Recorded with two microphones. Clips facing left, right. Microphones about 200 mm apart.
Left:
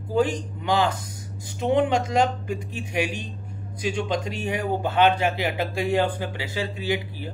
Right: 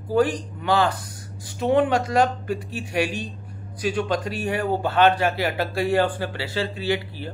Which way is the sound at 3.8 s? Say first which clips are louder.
Right 2 dB; 20° left (ahead or behind).